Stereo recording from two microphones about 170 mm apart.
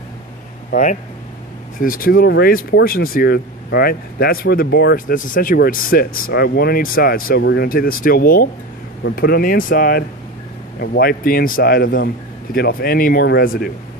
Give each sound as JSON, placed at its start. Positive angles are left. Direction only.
{"t": 0.7, "sound": "speech", "side_deg": 45}